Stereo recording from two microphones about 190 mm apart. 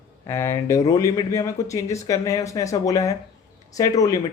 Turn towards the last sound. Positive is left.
turn(degrees=20)  # may be behind; listen again after turning